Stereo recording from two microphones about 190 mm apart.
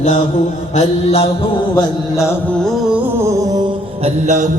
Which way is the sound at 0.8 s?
30° left (ahead or behind).